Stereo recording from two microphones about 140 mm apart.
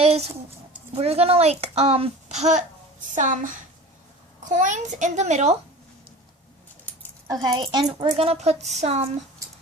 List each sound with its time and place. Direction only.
0.0 s a sound: 45° right (ahead or behind)
0.9 s a child's voice: 45° right (ahead or behind)
3.2 s a woman's voice: 65° right (ahead or behind)
6.9 s a sound: 10° left (ahead or behind)
7.4 s a child's voice: 35° right (ahead or behind)
8.1 s a child's voice: 45° right (ahead or behind)